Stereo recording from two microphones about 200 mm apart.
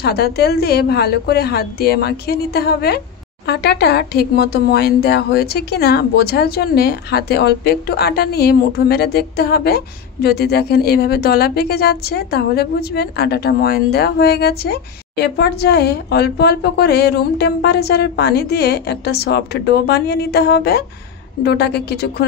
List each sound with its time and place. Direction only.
0.0 s speech: 50° left (ahead or behind)